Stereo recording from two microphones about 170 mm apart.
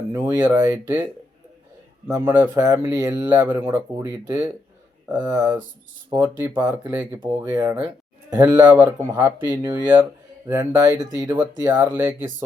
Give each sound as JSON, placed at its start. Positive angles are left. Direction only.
{"t": 0.1, "sound": "speech", "side_deg": -15}
{"t": 2.0, "sound": "speech", "side_deg": -15}